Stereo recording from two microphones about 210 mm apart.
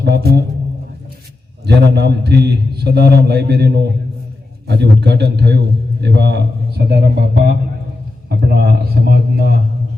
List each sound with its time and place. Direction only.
0.1 s a man's voice: 50° right (ahead or behind)
1.6 s a man's voice: 50° right (ahead or behind)